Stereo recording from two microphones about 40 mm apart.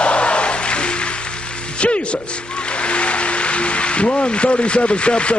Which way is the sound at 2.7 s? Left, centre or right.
Left.